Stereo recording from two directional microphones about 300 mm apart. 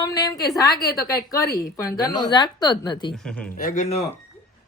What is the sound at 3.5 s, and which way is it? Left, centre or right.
Speech, left.